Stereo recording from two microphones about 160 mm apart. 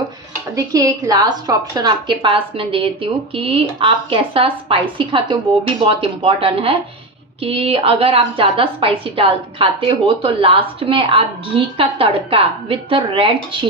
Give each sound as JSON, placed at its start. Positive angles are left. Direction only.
{"t": 0.5, "sound": "a woman's voice", "side_deg": -20}